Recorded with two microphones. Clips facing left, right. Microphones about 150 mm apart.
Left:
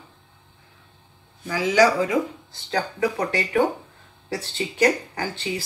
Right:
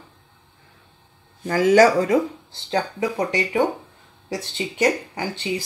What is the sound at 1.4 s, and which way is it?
Speech, 50° right (ahead or behind).